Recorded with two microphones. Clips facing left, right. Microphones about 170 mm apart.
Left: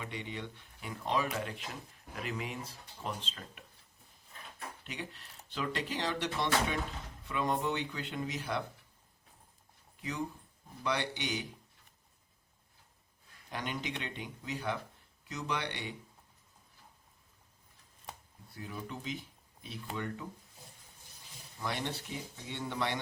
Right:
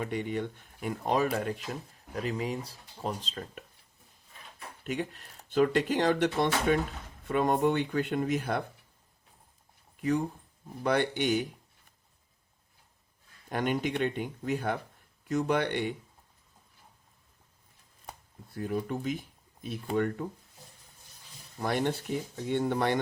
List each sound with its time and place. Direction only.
0.0 s speech: 50° right (ahead or behind)
4.8 s speech: 50° right (ahead or behind)
10.0 s speech: 50° right (ahead or behind)
13.5 s speech: 50° right (ahead or behind)
18.5 s speech: 50° right (ahead or behind)
21.6 s speech: 50° right (ahead or behind)